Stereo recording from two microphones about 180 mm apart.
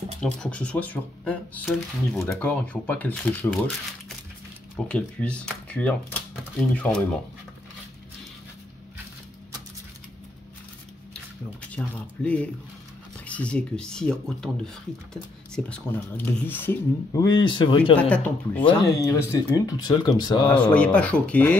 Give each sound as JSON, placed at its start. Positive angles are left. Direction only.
{"t": 0.2, "sound": "speech", "side_deg": 5}
{"t": 4.8, "sound": "speech", "side_deg": 5}
{"t": 11.7, "sound": "speech", "side_deg": 5}
{"t": 18.1, "sound": "speech", "side_deg": 10}
{"t": 18.7, "sound": "speech", "side_deg": 20}
{"t": 20.6, "sound": "speech", "side_deg": 5}